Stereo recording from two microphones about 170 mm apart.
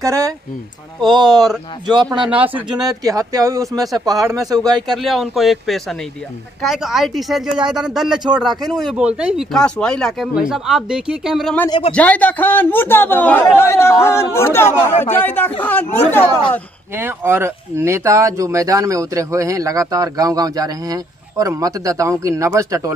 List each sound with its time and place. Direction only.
0.0 s speech: 20° right (ahead or behind)
2.1 s speech: 5° right (ahead or behind)
2.7 s speech: 20° right (ahead or behind)
4.9 s speech: centre (ahead or behind)
11.9 s speech: 10° left (ahead or behind)
16.9 s speech: 15° right (ahead or behind)